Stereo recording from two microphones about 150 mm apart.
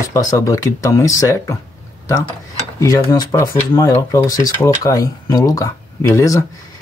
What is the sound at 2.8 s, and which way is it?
Speech, 20° left (ahead or behind).